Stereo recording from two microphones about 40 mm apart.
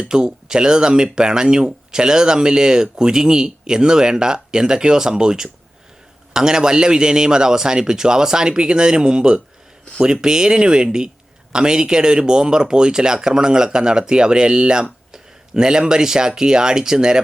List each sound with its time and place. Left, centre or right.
0.1 s speech: centre